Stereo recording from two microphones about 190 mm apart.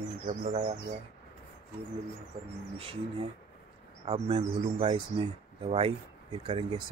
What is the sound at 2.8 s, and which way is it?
Speech, 30° right (ahead or behind).